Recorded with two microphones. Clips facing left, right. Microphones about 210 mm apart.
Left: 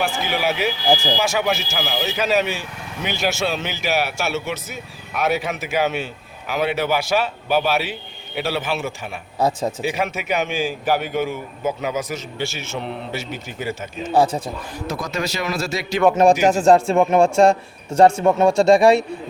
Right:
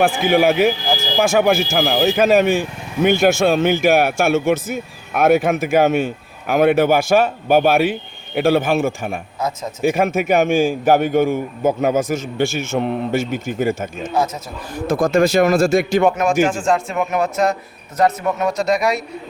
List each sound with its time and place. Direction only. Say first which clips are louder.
0.2 s speech: right 8 dB; 50° right (ahead or behind)
9.4 s speech: left 5 dB; 30° left (ahead or behind)
9.8 s speech: right 7 dB; 50° right (ahead or behind)
14.1 s speech: left 4 dB; 30° left (ahead or behind)
14.8 s speech: right 11 dB; 50° right (ahead or behind)
16.4 s a man's voice: left 2 dB; 40° left (ahead or behind)